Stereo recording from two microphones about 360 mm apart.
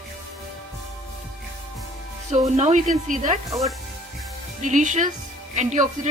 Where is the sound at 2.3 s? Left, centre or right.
Centre.